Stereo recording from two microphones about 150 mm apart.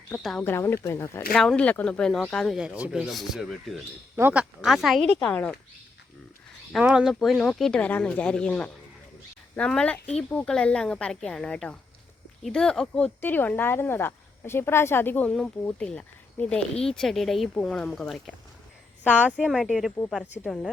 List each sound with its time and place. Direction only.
0.2 s speech: centre (ahead or behind)
0.4 s speech: 15° left (ahead or behind)
1.3 s speech: 5° left (ahead or behind)
4.2 s speech: 10° right (ahead or behind); by 5.5 s 5° left (ahead or behind)
6.7 s speech: 5° right (ahead or behind)
19.0 s speech: 10° right (ahead or behind)